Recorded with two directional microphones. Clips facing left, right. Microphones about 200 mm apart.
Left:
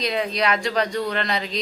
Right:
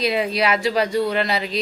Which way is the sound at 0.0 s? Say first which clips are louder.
Right 3 dB; 5° right (ahead or behind).